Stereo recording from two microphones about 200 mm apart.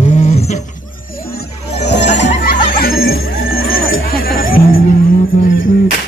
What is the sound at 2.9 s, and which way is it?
Music, 85° left.